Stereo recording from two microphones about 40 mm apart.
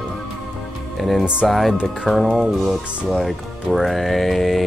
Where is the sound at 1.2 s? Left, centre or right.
Right.